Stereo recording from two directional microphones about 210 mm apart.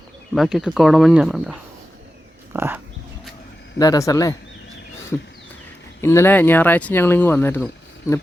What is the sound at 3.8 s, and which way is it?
Speech, 15° left (ahead or behind).